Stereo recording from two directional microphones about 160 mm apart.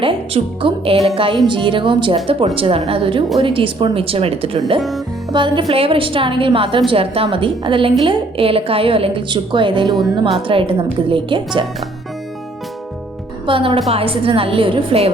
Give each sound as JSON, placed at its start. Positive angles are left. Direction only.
{"t": 0.0, "sound": "a woman's voice", "side_deg": -35}
{"t": 4.8, "sound": "a woman's voice", "side_deg": 0}
{"t": 5.3, "sound": "a woman's voice", "side_deg": -30}
{"t": 9.9, "sound": "a woman's voice", "side_deg": 0}
{"t": 10.3, "sound": "a woman's voice", "side_deg": -30}
{"t": 13.5, "sound": "a woman's voice", "side_deg": -35}